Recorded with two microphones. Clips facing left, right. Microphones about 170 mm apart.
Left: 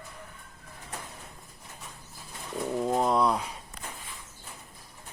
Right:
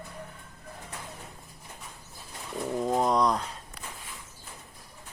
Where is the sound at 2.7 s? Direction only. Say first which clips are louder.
Even; centre (ahead or behind).